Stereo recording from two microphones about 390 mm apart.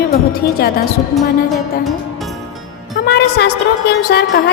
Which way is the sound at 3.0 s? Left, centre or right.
Left.